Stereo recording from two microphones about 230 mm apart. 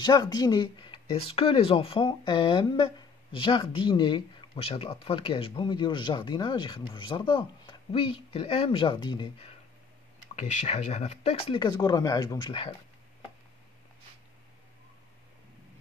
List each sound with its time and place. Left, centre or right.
0.0 s speech: centre
10.4 s speech: left